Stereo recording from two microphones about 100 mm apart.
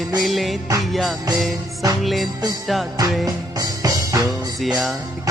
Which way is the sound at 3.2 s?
35° right (ahead or behind).